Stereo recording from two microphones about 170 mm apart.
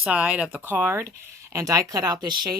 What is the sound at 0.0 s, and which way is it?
Speech, 5° right (ahead or behind).